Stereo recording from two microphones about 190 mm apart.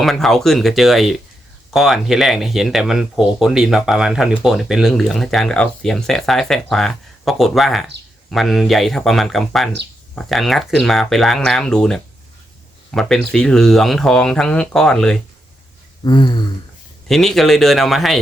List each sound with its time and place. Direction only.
0.0 s speech: centre (ahead or behind)
16.0 s a sound: 25° left (ahead or behind)
17.1 s speech: centre (ahead or behind)